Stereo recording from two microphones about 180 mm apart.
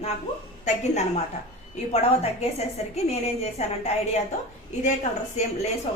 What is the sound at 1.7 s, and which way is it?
A woman's voice, 35° left (ahead or behind).